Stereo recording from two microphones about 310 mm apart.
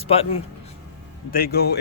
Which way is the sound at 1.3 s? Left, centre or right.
Left.